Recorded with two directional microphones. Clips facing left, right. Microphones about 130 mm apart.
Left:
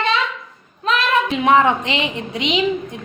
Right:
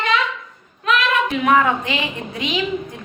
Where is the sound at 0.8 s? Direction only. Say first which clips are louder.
Even; 30° left (ahead or behind).